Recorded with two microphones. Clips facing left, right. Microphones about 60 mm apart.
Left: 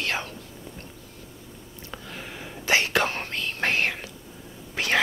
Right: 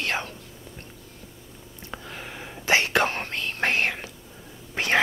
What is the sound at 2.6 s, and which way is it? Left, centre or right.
Whispering, right.